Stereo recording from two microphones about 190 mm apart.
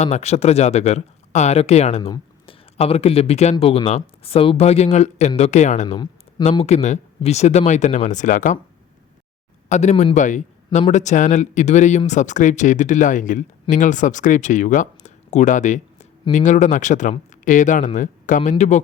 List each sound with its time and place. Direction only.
0.0 s speech: 35° left (ahead or behind)
9.6 s speech: 35° left (ahead or behind)